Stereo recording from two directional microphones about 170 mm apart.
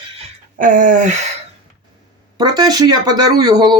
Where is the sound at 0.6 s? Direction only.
50° right (ahead or behind).